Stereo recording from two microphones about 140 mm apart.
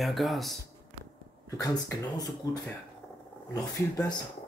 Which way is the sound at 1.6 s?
25° left (ahead or behind).